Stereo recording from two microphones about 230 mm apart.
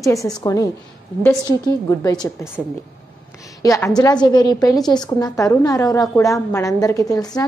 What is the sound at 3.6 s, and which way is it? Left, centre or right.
A woman's voice, centre.